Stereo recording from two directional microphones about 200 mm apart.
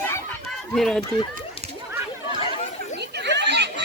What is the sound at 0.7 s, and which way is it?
Run, centre (ahead or behind).